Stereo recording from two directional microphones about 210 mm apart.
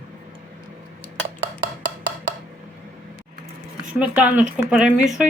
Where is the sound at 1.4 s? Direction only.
20° right (ahead or behind).